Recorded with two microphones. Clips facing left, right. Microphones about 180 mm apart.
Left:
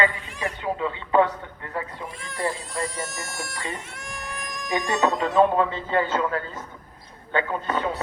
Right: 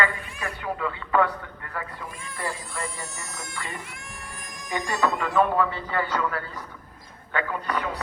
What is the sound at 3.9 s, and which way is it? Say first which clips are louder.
Music: left 6 dB; 75° left (ahead or behind).